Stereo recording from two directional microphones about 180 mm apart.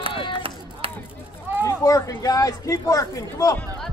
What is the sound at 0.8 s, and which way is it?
Chop, 30° right (ahead or behind).